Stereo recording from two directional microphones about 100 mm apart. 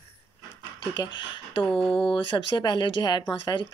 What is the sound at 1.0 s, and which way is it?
Speech, 50° left (ahead or behind).